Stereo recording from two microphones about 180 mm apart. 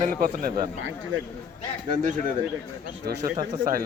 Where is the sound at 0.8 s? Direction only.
90° right.